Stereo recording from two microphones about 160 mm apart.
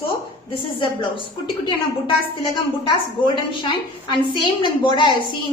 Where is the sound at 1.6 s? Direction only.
30° left (ahead or behind).